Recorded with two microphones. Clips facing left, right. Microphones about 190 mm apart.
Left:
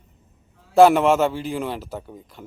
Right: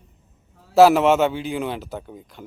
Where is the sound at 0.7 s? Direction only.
5° right (ahead or behind).